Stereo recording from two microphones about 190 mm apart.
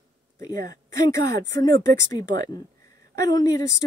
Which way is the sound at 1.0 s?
15° left (ahead or behind).